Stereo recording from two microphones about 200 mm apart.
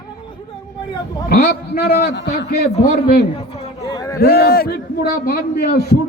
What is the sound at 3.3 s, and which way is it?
Chatter, 25° left (ahead or behind).